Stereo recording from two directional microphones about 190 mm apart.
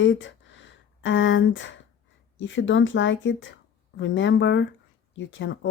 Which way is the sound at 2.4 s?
75° left (ahead or behind).